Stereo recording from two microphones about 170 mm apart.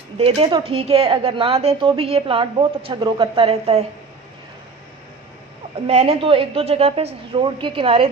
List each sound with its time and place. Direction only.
0.2 s a woman's voice: 35° right (ahead or behind)
5.9 s a woman's voice: 40° right (ahead or behind)